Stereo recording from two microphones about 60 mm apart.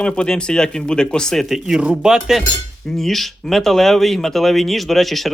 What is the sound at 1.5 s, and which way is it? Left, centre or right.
Speech, centre.